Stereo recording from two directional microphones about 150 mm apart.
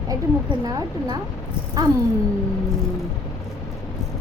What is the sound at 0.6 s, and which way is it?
Speech, 25° right (ahead or behind).